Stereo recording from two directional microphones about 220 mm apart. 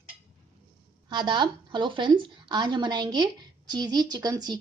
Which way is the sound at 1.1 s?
20° right (ahead or behind).